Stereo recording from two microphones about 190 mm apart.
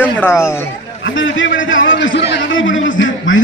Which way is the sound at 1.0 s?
90° left.